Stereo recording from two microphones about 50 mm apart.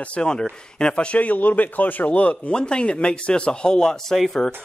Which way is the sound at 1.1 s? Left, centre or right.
Left.